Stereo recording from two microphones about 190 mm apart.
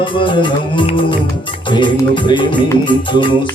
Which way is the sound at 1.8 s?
25° left (ahead or behind).